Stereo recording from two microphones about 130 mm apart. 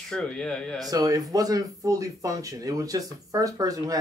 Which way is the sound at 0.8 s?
30° right (ahead or behind).